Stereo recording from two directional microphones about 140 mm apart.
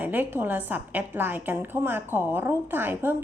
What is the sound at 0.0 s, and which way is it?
A woman's voice, 15° right (ahead or behind).